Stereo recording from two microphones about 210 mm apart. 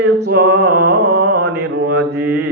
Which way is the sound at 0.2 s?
50° right (ahead or behind).